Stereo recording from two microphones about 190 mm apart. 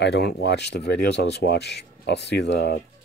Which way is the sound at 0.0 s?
60° left (ahead or behind).